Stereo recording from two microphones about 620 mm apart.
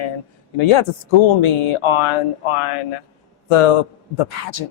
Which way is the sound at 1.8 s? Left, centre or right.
Left.